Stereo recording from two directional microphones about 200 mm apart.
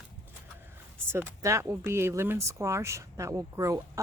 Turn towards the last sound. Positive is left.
turn(degrees=-15)  # may be behind; listen again after turning